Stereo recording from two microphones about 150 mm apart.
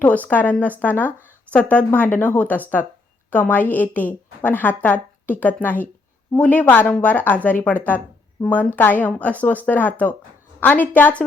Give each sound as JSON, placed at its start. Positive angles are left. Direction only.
{"t": 0.3, "sound": "speech", "side_deg": 10}